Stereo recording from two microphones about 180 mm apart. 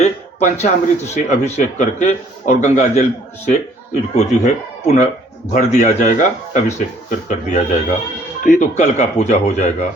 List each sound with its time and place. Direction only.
0.0 s a man's voice: 40° left (ahead or behind)